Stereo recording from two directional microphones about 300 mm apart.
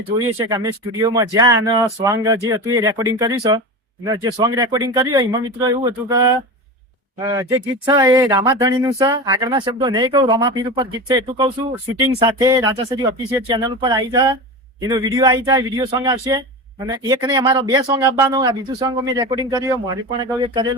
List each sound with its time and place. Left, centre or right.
0.2 s speech: centre